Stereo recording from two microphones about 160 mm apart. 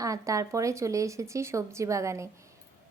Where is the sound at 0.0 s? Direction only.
20° right (ahead or behind).